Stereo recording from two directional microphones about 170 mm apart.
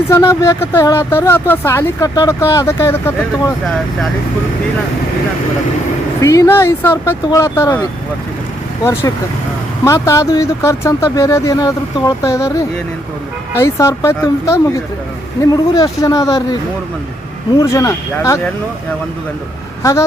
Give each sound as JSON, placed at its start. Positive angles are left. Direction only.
{"t": 0.1, "sound": "speech", "side_deg": 15}
{"t": 6.2, "sound": "speech", "side_deg": 20}
{"t": 9.8, "sound": "speech", "side_deg": 15}
{"t": 15.7, "sound": "speech", "side_deg": 20}
{"t": 17.6, "sound": "speech", "side_deg": 20}
{"t": 19.8, "sound": "speech", "side_deg": 20}